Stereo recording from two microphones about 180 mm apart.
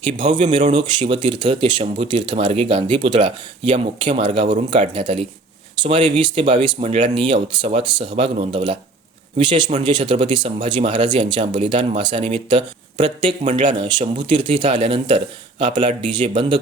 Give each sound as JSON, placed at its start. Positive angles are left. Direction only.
{"t": 0.0, "sound": "speech", "side_deg": -30}